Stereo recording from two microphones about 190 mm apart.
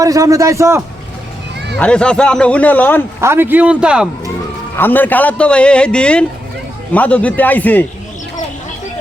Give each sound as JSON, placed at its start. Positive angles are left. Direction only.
{"t": 0.0, "sound": "a man's voice", "side_deg": -15}
{"t": 1.7, "sound": "a man's voice", "side_deg": 5}
{"t": 3.2, "sound": "a man's voice", "side_deg": -10}
{"t": 4.8, "sound": "a man's voice", "side_deg": 10}